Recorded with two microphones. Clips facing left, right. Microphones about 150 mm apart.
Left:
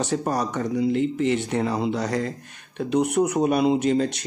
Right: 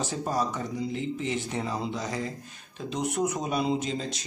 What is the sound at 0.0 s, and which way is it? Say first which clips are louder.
Speech: left 5 dB; 70° left (ahead or behind).